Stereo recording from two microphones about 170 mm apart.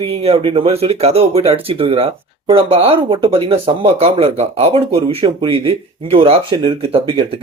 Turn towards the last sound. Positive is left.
turn(degrees=-30)  # may be behind; listen again after turning